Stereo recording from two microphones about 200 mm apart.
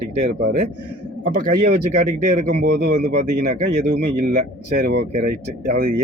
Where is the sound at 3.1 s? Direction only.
35° right (ahead or behind).